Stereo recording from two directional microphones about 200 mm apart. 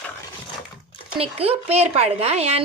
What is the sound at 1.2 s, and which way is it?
Speech, 30° right (ahead or behind).